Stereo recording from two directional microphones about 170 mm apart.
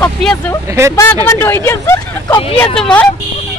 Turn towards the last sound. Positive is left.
turn(degrees=5)  # may be behind; listen again after turning